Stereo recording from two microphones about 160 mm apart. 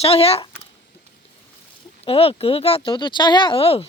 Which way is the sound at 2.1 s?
40° left (ahead or behind).